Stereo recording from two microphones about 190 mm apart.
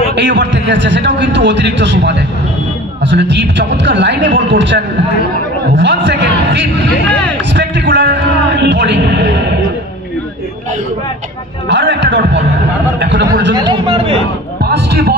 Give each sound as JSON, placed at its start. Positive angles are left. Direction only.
{"t": 0.1, "sound": "a man's voice", "side_deg": -70}
{"t": 8.6, "sound": "a sound", "side_deg": -65}
{"t": 11.7, "sound": "music", "side_deg": -70}
{"t": 13.0, "sound": "speech", "side_deg": -65}
{"t": 13.6, "sound": "speech", "side_deg": -30}
{"t": 14.6, "sound": "a sound", "side_deg": -60}